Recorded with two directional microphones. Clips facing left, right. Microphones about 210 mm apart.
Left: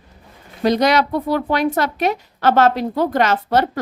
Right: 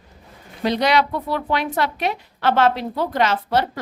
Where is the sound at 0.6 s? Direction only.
40° left (ahead or behind).